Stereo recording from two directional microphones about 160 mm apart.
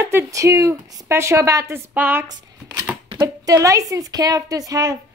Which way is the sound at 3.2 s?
20° right (ahead or behind).